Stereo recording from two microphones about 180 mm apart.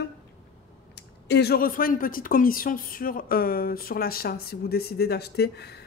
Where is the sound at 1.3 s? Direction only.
65° left (ahead or behind).